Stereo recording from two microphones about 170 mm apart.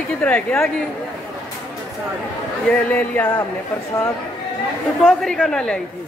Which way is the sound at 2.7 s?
10° left (ahead or behind).